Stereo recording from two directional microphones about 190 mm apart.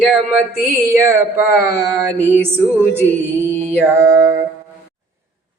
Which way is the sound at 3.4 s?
10° left (ahead or behind).